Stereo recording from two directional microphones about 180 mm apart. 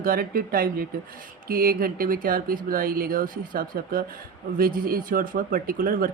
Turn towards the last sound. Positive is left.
turn(degrees=-50)  # may be behind; listen again after turning